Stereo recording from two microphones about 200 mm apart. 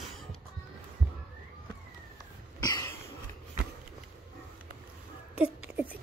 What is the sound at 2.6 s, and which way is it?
Cough, 15° left (ahead or behind).